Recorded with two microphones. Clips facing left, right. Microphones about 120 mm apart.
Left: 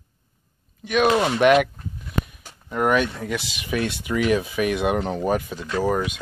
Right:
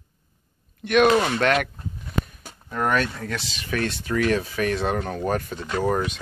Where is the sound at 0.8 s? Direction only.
5° left (ahead or behind).